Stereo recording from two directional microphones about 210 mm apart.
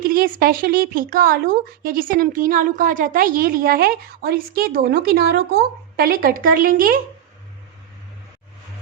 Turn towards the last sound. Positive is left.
turn(degrees=-40)  # may be behind; listen again after turning